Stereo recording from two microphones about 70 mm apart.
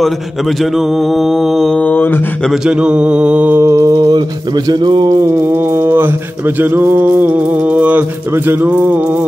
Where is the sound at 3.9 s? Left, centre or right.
Right.